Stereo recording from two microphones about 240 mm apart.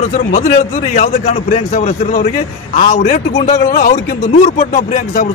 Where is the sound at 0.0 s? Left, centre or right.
Left.